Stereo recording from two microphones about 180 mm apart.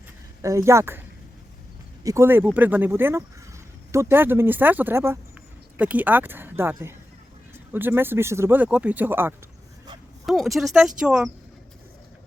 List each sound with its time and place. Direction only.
0.4 s speech: 15° right (ahead or behind)
2.0 s speech: 15° right (ahead or behind)
10.2 s speech: centre (ahead or behind)